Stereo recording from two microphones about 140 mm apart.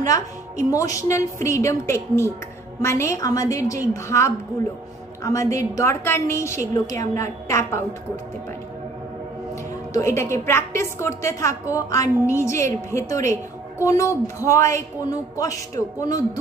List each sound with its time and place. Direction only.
0.7 s a woman's voice: 25° left (ahead or behind)
9.9 s a woman's voice: 20° left (ahead or behind)